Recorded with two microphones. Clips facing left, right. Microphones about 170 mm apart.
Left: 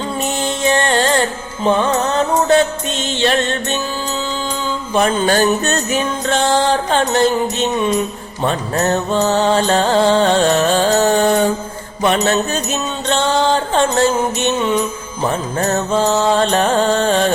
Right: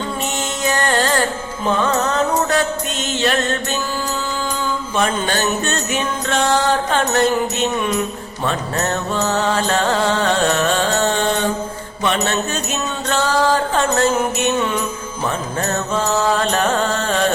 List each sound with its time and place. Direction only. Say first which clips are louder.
0.6 s music: left 3 dB; 25° left (ahead or behind)
3.1 s music: left 2 dB; 30° left (ahead or behind)
4.9 s mantra: left 6 dB; 40° left (ahead or behind)
8.4 s mantra: left 4 dB; 35° left (ahead or behind)
13.1 s music: left 2 dB; 25° left (ahead or behind)
15.9 s mantra: left 3 dB; 30° left (ahead or behind)